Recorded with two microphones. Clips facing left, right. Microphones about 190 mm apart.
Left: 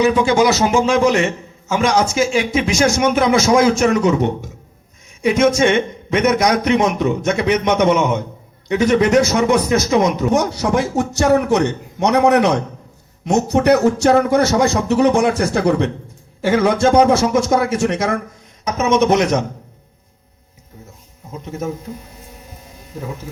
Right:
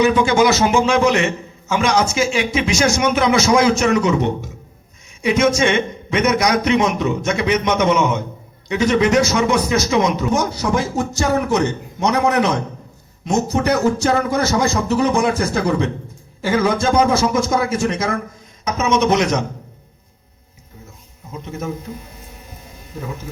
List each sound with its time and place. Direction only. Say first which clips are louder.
0.0 s a man's voice: left 1 dB; 35° left (ahead or behind); by 10.3 s 50° left (ahead or behind)
10.3 s speech: left 2 dB; 70° left (ahead or behind)
18.6 s a man's voice: left 2 dB; 55° left (ahead or behind)